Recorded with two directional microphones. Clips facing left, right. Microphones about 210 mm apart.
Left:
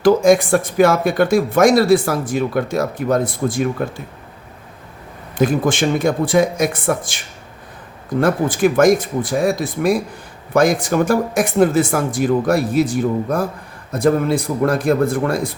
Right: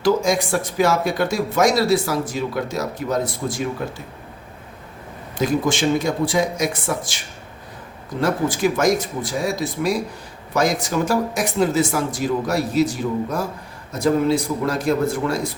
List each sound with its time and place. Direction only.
0.0 s speech: 55° left (ahead or behind)
5.4 s speech: 55° left (ahead or behind)
8.2 s speech: 55° left (ahead or behind)